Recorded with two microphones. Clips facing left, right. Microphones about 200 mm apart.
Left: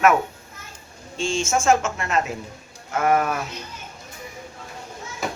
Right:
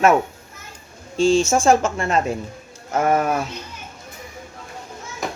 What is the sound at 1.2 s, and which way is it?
Speech, 35° right (ahead or behind).